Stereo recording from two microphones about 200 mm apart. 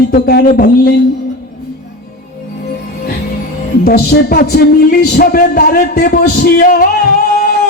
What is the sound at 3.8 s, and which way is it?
Speech, 50° left (ahead or behind).